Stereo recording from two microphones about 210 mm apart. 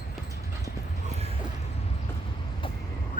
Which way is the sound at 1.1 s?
30° right (ahead or behind).